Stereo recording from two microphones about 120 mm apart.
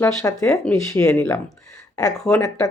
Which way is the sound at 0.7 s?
25° left (ahead or behind).